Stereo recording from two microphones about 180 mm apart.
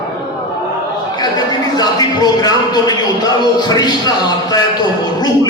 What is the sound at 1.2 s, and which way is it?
Speech, 20° left (ahead or behind).